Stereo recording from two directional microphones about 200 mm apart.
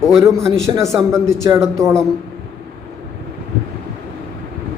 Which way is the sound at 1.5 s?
20° right (ahead or behind).